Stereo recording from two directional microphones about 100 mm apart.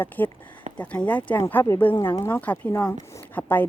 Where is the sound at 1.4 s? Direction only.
25° left (ahead or behind).